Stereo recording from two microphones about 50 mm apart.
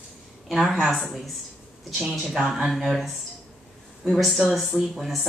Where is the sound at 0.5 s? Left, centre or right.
Centre.